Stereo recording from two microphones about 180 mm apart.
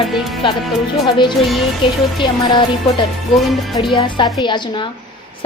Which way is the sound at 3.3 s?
Centre (ahead or behind).